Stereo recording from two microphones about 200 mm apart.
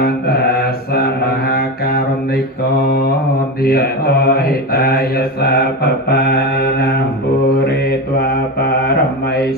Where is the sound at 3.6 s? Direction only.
50° left (ahead or behind).